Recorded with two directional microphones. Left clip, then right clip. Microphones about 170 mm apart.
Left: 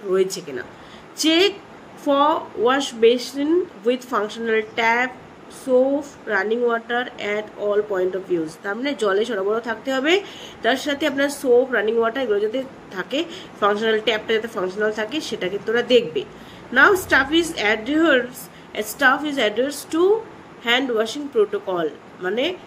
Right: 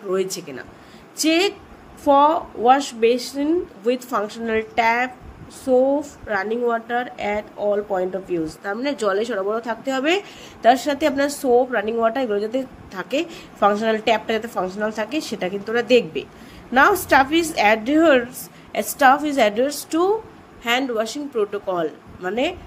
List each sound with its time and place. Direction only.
0.1 s speech: 50° right (ahead or behind)